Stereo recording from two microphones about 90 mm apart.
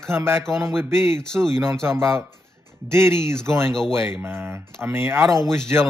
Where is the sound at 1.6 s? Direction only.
30° right (ahead or behind).